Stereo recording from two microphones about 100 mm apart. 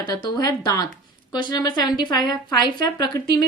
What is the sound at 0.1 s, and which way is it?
A woman's voice, 40° left (ahead or behind).